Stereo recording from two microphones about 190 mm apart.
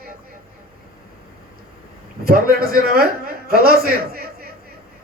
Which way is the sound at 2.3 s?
55° right (ahead or behind).